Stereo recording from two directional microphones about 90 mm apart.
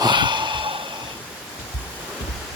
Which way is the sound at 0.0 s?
60° right (ahead or behind).